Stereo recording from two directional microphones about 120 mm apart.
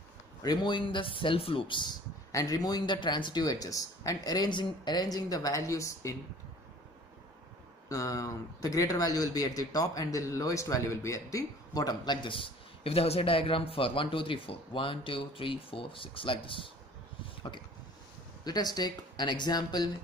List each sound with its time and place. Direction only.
0.4 s speech: 35° left (ahead or behind)
2.3 s speech: 30° left (ahead or behind)
7.9 s speech: 25° left (ahead or behind); by 16.7 s 50° left (ahead or behind)
18.4 s speech: 35° left (ahead or behind)